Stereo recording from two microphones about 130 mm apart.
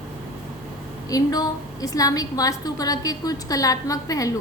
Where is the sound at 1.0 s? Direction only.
25° left (ahead or behind).